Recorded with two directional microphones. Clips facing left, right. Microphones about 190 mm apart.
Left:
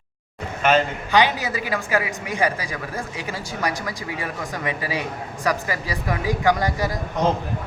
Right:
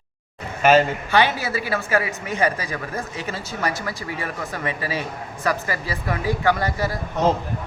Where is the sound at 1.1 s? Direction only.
15° left (ahead or behind).